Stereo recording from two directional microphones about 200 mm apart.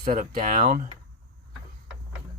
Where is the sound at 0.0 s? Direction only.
45° right (ahead or behind).